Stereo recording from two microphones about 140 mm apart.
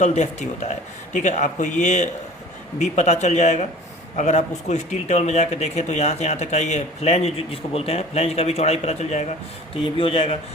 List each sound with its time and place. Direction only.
0.0 s speech: 55° left (ahead or behind)
9.7 s speech: 40° left (ahead or behind)